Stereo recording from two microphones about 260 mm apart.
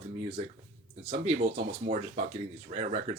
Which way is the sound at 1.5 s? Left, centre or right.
Right.